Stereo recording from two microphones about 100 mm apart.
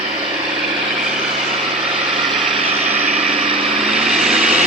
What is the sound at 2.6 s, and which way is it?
Vehicle, 80° right.